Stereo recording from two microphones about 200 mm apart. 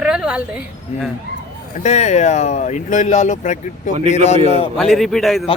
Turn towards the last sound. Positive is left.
turn(degrees=0)  # may be behind; listen again after turning